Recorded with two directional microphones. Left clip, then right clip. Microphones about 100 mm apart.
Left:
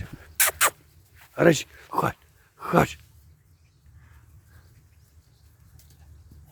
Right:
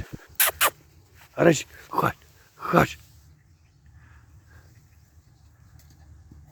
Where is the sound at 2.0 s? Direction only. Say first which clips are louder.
Right 2 dB; 25° right (ahead or behind).